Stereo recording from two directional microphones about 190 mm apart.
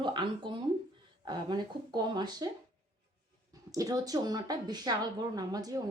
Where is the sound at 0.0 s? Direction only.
25° right (ahead or behind).